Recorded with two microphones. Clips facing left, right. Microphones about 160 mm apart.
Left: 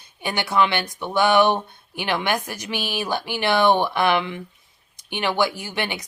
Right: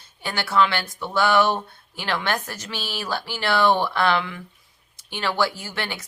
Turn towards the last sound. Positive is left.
turn(degrees=15)  # may be behind; listen again after turning